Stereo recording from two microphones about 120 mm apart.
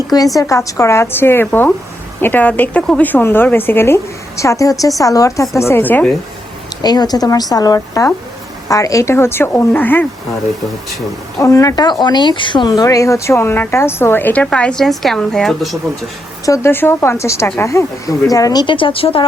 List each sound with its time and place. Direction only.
0.3 s a woman's voice: 25° left (ahead or behind)
6.8 s a woman's voice: 35° left (ahead or behind); by 10.1 s 15° left (ahead or behind)
11.3 s speech: 25° left (ahead or behind); by 15.8 s centre (ahead or behind)
16.5 s speech: 20° left (ahead or behind)
18.6 s speech: 45° left (ahead or behind)